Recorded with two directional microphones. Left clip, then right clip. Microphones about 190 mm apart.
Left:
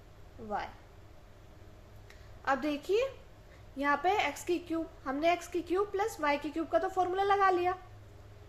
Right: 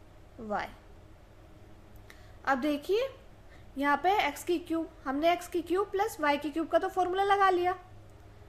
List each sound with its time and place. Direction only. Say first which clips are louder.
0.4 s speech: right 3 dB; 45° right (ahead or behind)
2.0 s a woman's voice: right 2 dB; 25° right (ahead or behind)